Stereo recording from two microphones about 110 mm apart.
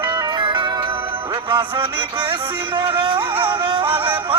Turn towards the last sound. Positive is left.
turn(degrees=-50)  # may be behind; listen again after turning